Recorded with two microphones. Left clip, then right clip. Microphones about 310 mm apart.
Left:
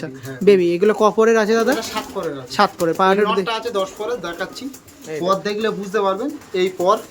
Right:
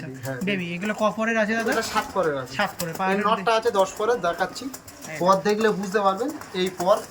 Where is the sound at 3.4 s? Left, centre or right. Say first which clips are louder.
Right 1 dB; centre.